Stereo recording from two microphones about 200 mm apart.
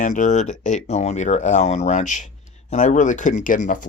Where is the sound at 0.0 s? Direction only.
40° left (ahead or behind).